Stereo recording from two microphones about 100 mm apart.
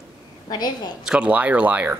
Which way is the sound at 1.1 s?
10° right (ahead or behind).